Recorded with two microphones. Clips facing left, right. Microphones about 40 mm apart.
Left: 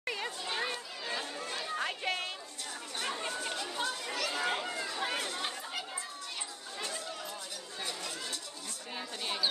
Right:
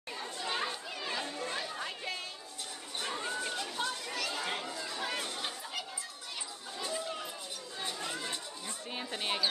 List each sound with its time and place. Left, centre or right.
0.0 s chatter: left
0.4 s chatter: centre
1.8 s a sound: left
3.0 s chatter: centre
7.8 s chatter: right
8.9 s a sound: right